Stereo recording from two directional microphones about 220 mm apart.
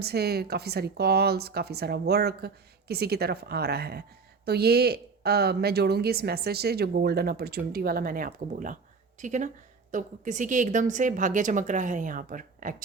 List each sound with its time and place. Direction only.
0.0 s a woman's voice: 45° right (ahead or behind)